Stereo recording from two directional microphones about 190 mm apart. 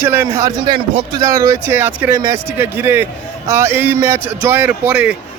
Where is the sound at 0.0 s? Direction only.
10° right (ahead or behind).